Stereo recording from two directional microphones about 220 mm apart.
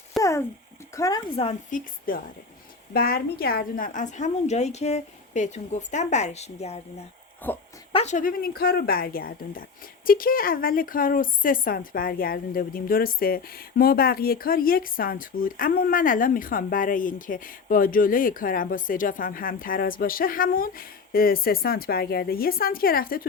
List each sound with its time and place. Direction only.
0.2 s a sound: 15° left (ahead or behind)
0.9 s speech: 15° left (ahead or behind)
1.4 s speech: 25° left (ahead or behind)
2.9 s a woman's voice: 40° left (ahead or behind)
7.4 s speech: 10° left (ahead or behind)
7.9 s a woman's voice: 35° left (ahead or behind)